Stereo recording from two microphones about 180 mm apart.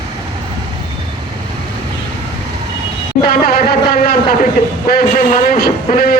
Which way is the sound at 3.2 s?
55° left (ahead or behind).